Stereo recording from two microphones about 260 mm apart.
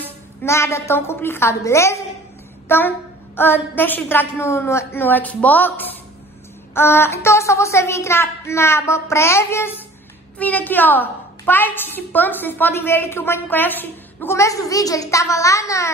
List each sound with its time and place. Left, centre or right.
0.4 s a woman's voice: centre